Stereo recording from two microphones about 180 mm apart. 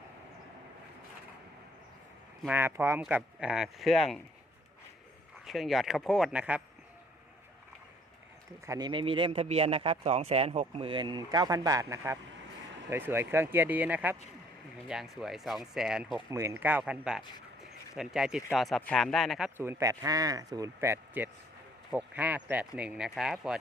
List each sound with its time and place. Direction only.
2.5 s a man's voice: 10° right (ahead or behind)
5.5 s speech: centre (ahead or behind)
8.6 s a man's voice: 15° right (ahead or behind)
8.9 s a man's voice: 30° right (ahead or behind); by 16.2 s 5° right (ahead or behind)
16.3 s a man's voice: 15° right (ahead or behind); by 19.5 s centre (ahead or behind)
19.5 s a man's voice: 15° right (ahead or behind)